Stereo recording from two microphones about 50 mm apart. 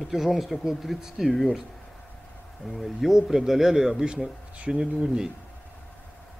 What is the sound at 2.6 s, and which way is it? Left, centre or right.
Speech, centre.